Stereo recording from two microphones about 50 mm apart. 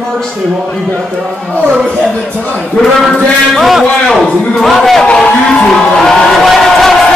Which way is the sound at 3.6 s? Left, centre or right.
Centre.